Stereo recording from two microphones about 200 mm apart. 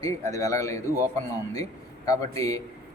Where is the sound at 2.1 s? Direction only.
15° left (ahead or behind).